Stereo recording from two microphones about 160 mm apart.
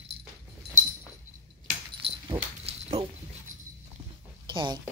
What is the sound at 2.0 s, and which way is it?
Dog, 35° right (ahead or behind).